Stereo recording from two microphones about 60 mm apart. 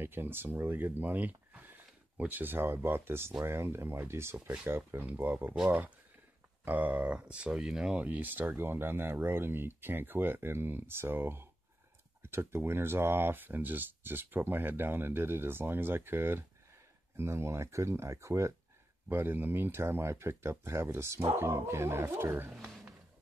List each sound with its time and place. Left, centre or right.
0.0 s speech: right
5.0 s speech: right
6.6 s speech: right; by 8.0 s centre
8.0 s speech: right
19.0 s speech: right
22.5 s a sound: centre